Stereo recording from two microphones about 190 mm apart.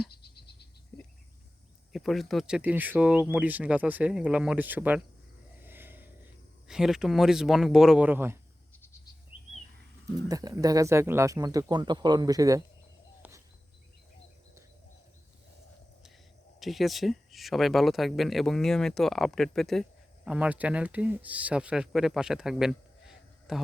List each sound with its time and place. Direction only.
0.9 s a sound: 10° left (ahead or behind)
1.9 s speech: centre (ahead or behind)
5.6 s a sound: 10° right (ahead or behind)
6.7 s speech: 5° right (ahead or behind)
10.2 s speech: 20° right (ahead or behind)
13.2 s bird: 10° right (ahead or behind)
16.6 s speech: centre (ahead or behind)